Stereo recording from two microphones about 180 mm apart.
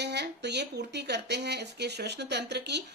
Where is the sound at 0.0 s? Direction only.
70° right (ahead or behind).